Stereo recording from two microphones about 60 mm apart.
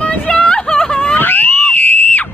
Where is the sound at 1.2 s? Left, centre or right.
Left.